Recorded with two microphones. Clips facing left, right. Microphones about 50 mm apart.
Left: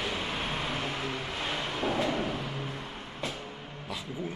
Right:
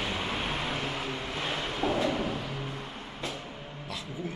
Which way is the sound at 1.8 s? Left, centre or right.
Centre.